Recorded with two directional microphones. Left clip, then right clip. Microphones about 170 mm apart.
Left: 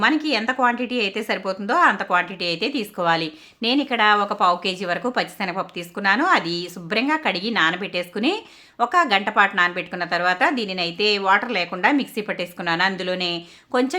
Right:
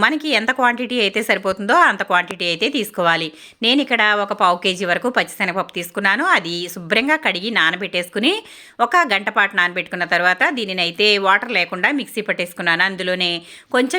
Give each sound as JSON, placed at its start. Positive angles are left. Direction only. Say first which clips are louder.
{"t": 0.0, "sound": "a woman's voice", "louder": "right 3 dB", "side_deg": -25}